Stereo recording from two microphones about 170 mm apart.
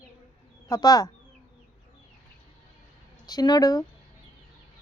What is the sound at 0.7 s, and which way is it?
Speech, 20° left (ahead or behind).